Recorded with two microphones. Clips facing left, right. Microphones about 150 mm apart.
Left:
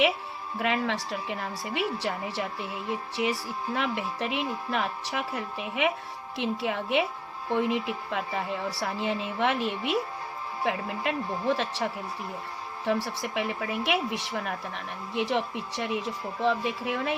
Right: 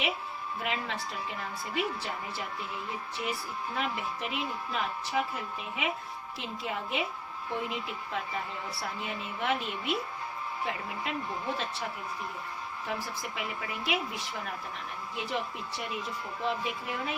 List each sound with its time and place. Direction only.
0.6 s speech: 80° left
8.8 s speech: 90° left
10.6 s speech: 70° left (ahead or behind)